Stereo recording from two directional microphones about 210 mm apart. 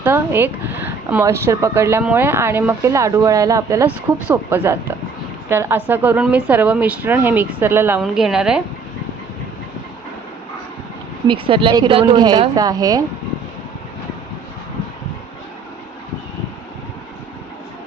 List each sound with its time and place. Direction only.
0.0 s a woman's voice: 10° right (ahead or behind)
11.3 s speech: 25° right (ahead or behind)